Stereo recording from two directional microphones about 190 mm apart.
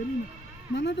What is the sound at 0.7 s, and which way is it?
Speech, 65° left (ahead or behind).